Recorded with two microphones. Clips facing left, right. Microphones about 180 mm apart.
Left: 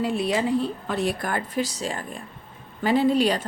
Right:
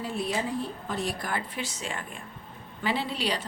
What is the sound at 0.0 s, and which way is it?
A woman's voice, 75° left (ahead or behind).